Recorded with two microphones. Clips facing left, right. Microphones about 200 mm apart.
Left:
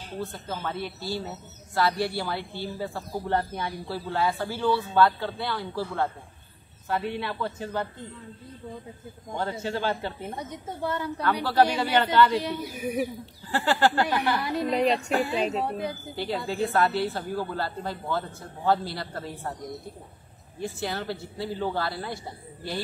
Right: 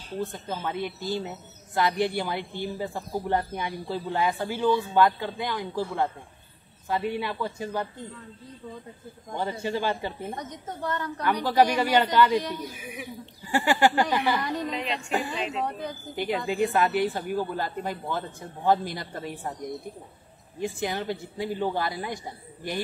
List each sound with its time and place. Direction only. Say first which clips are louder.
0.2 s speech: right 2 dB; 20° right (ahead or behind)
9.3 s speech: right 1 dB; 10° right (ahead or behind)
10.3 s a woman's voice: left 1 dB; 10° left (ahead or behind)
11.4 s speech: right 1 dB; 15° right (ahead or behind)
12.4 s a woman's voice: left 2 dB; 10° left (ahead or behind)
12.7 s speech: left 10 dB; 40° left (ahead or behind)
13.5 s speech: right 1 dB; 15° right (ahead or behind)
14.7 s speech: left 6 dB; 40° left (ahead or behind)
15.6 s a woman's voice: left 2 dB; 10° left (ahead or behind)
16.2 s speech: right 3 dB; 15° right (ahead or behind)
20.6 s speech: right 2 dB; 15° right (ahead or behind)